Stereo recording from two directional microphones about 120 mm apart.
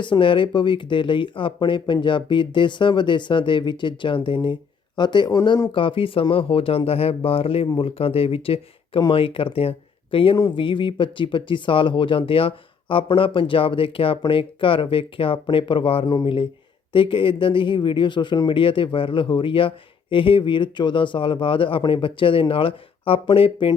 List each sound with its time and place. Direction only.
0.0 s speech: 45° left (ahead or behind)